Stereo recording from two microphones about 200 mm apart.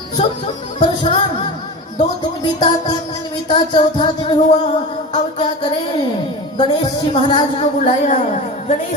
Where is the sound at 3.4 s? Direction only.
25° left (ahead or behind).